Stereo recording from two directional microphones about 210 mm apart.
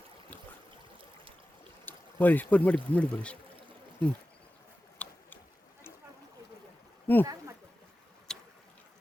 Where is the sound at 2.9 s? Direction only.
5° left (ahead or behind).